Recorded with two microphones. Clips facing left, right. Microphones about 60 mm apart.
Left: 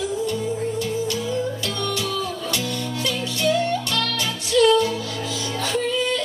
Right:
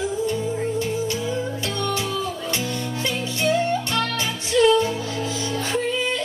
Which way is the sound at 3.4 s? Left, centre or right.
Right.